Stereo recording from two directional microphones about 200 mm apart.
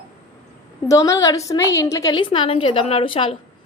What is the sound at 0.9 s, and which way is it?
A woman's voice, 15° left (ahead or behind).